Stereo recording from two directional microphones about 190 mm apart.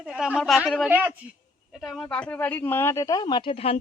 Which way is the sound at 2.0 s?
5° left (ahead or behind).